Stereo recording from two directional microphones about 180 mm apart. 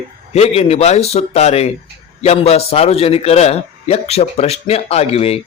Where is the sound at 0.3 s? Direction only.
35° left (ahead or behind).